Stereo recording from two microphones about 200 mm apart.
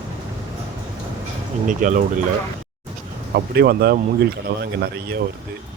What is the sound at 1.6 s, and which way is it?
Speech, 40° right (ahead or behind).